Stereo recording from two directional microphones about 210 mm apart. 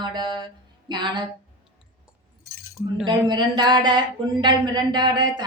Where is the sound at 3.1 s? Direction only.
20° right (ahead or behind).